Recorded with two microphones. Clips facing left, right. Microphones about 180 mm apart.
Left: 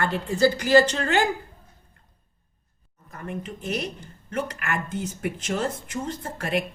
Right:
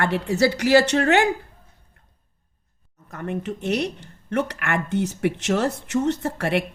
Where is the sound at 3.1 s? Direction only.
70° right (ahead or behind).